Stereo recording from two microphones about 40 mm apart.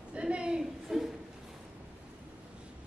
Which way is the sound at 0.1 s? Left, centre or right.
Right.